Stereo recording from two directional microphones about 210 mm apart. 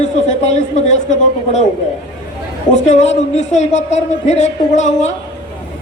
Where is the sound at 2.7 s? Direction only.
35° left (ahead or behind).